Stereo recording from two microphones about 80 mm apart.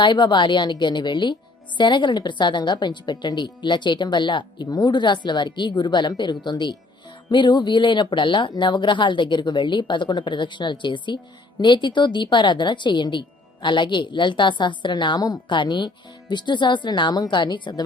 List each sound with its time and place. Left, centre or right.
0.0 s speech: left